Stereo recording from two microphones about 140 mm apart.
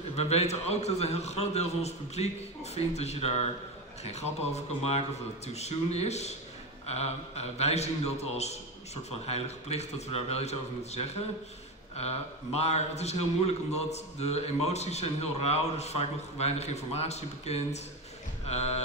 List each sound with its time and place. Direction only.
0.1 s a man's voice: 50° left (ahead or behind)